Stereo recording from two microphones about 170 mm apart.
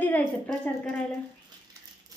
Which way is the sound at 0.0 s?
10° left (ahead or behind).